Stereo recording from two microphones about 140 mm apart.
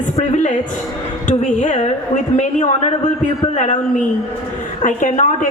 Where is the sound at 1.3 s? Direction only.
60° left (ahead or behind).